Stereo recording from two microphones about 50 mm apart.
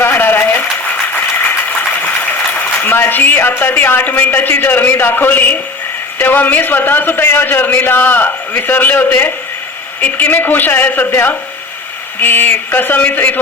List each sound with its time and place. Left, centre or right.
0.0 s a sound: left
2.8 s a man's voice: left
9.0 s speech: left
10.0 s a man's voice: left
12.2 s a man's voice: left